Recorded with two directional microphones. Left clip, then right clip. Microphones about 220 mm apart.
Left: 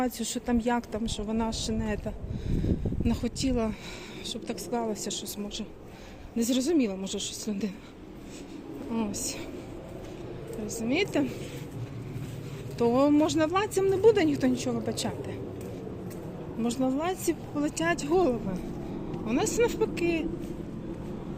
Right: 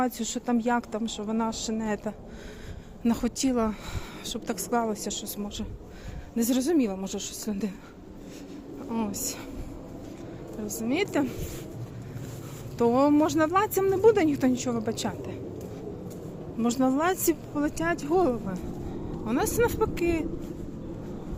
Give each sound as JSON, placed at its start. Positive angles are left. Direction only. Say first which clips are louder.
{"t": 0.0, "sound": "speech", "louder": "right 2 dB", "side_deg": -10}
{"t": 8.9, "sound": "speech", "louder": "right 1 dB", "side_deg": -5}
{"t": 10.7, "sound": "speech", "louder": "even", "side_deg": -10}
{"t": 12.8, "sound": "speech", "louder": "right 1 dB", "side_deg": -10}
{"t": 16.6, "sound": "speech", "louder": "right 4 dB", "side_deg": -20}
{"t": 17.6, "sound": "speech", "louder": "even", "side_deg": -10}